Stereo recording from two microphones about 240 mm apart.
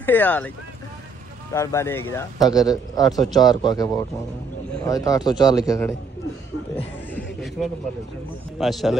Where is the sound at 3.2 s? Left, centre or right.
Centre.